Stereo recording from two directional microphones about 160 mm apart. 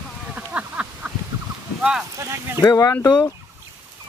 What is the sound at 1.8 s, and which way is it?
Boat, 5° right (ahead or behind).